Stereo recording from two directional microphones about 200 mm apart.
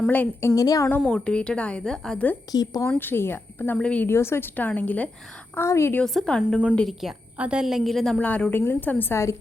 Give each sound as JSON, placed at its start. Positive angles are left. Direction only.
{"t": 0.1, "sound": "a woman's voice", "side_deg": 10}
{"t": 2.5, "sound": "a woman's voice", "side_deg": 20}